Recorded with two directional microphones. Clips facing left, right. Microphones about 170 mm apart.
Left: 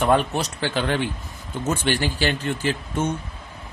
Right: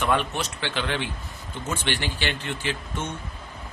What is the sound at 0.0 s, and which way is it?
Speech, 35° left (ahead or behind).